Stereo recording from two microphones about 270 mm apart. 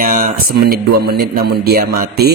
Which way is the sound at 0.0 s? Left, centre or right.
Right.